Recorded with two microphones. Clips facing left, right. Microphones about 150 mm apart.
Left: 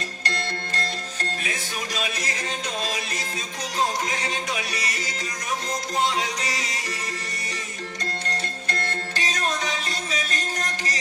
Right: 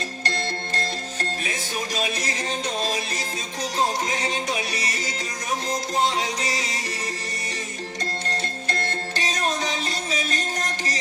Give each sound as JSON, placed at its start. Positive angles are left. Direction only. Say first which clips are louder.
{"t": 0.3, "sound": "music", "louder": "right 1 dB", "side_deg": -30}
{"t": 4.1, "sound": "music", "louder": "right 2 dB", "side_deg": -30}
{"t": 8.3, "sound": "music", "louder": "right 2 dB", "side_deg": -30}